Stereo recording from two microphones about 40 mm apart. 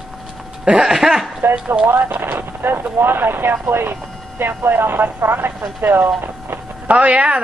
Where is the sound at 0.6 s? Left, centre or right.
Centre.